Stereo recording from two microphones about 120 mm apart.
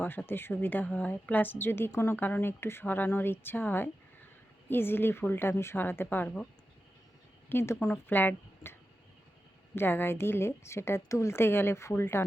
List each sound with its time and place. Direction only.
0.0 s a woman's voice: 15° left (ahead or behind)
7.5 s a woman's voice: 20° left (ahead or behind)
9.7 s a woman's voice: 20° left (ahead or behind)